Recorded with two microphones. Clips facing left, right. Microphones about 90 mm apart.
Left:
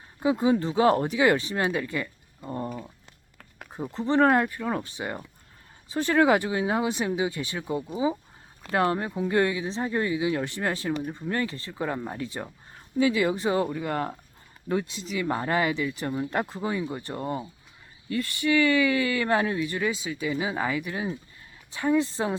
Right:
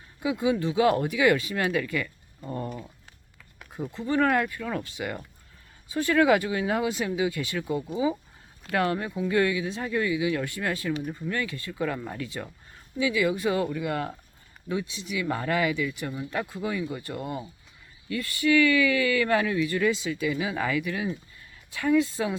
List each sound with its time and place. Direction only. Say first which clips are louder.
0.2 s speech: left 3 dB; 40° left (ahead or behind)
3.7 s speech: left 2 dB; 30° left (ahead or behind)
13.0 s speech: left 2 dB; 40° left (ahead or behind)
13.4 s speech: left 1 dB; 30° left (ahead or behind)